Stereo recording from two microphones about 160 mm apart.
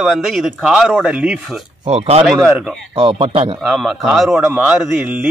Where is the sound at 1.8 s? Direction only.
40° right (ahead or behind).